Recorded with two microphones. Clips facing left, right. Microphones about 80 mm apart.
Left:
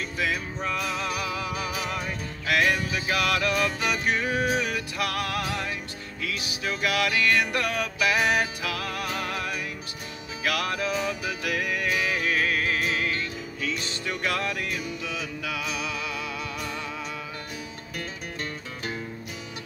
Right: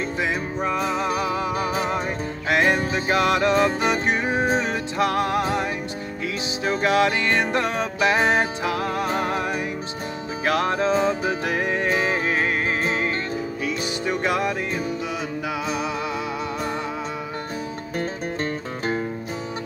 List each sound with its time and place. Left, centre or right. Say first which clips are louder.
0.2 s music: right 2 dB; right
17.9 s music: right 8 dB; right